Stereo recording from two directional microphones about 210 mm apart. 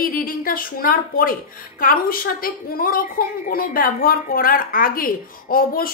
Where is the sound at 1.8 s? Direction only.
45° left (ahead or behind).